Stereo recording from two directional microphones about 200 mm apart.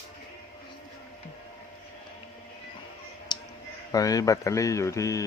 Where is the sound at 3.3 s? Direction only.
20° left (ahead or behind).